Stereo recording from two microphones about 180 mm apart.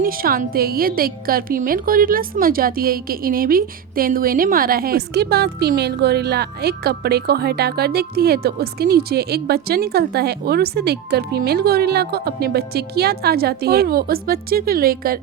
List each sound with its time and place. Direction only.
0.0 s a woman's voice: 55° right (ahead or behind)